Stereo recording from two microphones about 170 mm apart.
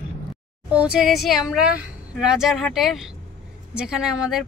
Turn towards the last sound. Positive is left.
turn(degrees=-5)  # may be behind; listen again after turning